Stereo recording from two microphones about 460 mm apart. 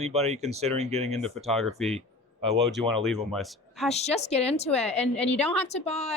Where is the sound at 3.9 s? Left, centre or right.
Centre.